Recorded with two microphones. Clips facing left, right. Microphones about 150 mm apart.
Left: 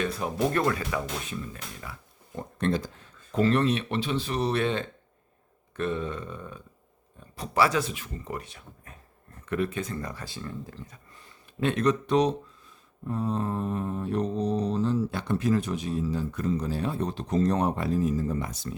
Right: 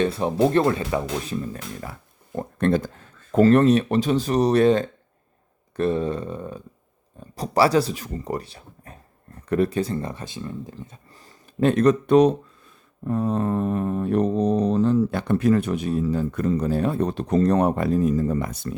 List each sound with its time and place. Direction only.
0.0 s speech: 30° right (ahead or behind)
11.6 s speech: 45° right (ahead or behind)
13.1 s mantra: 60° right (ahead or behind)